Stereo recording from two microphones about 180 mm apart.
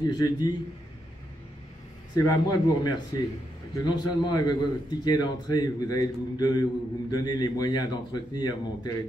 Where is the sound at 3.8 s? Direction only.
25° left (ahead or behind).